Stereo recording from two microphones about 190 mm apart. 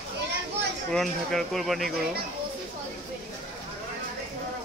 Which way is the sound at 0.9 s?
Centre (ahead or behind).